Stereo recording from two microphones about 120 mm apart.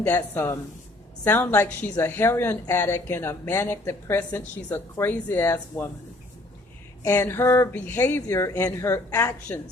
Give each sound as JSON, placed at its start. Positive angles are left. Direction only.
{"t": 0.0, "sound": "a woman's voice", "side_deg": 20}
{"t": 7.0, "sound": "a woman's voice", "side_deg": 20}